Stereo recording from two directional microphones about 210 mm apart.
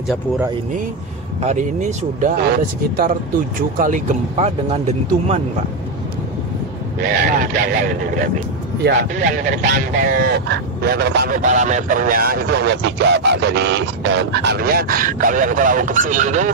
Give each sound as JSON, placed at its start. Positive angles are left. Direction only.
{"t": 1.4, "sound": "speech", "side_deg": -35}
{"t": 7.0, "sound": "speech", "side_deg": -45}
{"t": 9.2, "sound": "speech", "side_deg": -40}